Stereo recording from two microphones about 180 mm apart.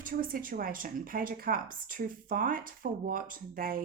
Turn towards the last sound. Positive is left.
turn(degrees=-55)  # may be behind; listen again after turning